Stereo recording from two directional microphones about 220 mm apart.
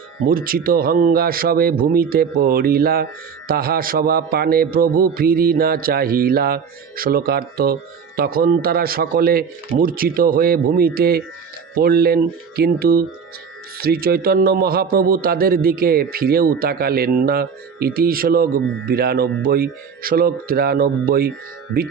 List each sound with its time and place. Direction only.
0.2 s speech: 40° right (ahead or behind)